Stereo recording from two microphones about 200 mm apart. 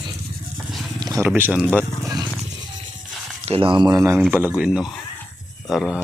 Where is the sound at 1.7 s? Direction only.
10° right (ahead or behind).